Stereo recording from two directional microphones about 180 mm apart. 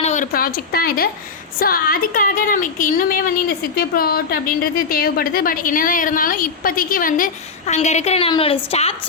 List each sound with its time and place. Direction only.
0.0 s a woman's voice: 45° left (ahead or behind)
7.7 s a woman's voice: 40° left (ahead or behind)